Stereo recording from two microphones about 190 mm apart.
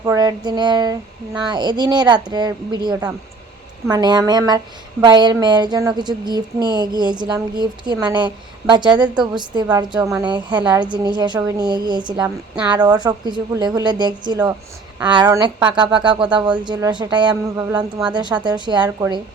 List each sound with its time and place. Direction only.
0.0 s a woman's voice: 20° right (ahead or behind)